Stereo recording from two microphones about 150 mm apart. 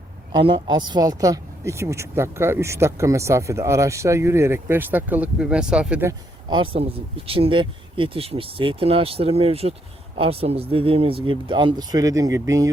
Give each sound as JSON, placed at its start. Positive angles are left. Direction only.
{"t": 0.3, "sound": "speech", "side_deg": -35}
{"t": 6.5, "sound": "speech", "side_deg": -35}